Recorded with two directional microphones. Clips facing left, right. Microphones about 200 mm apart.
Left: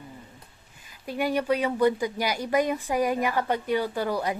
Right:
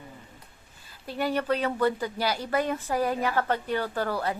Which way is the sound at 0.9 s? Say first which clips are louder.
Left 2 dB; 10° left (ahead or behind).